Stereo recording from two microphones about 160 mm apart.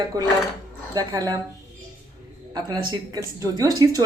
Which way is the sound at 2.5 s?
25° right (ahead or behind).